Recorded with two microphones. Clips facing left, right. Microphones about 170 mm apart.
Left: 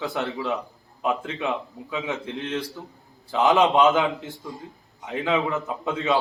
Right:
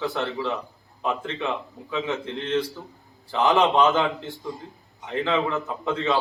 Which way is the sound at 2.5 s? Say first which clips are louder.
Right 8 dB; centre (ahead or behind).